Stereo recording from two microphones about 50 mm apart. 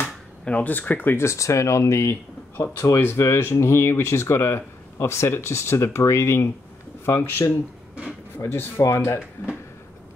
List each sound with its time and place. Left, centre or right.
0.0 s a sound: left
0.7 s speech: left
1.1 s speech: left